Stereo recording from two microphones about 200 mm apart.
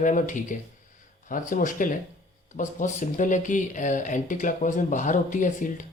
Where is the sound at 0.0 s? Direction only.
40° left (ahead or behind).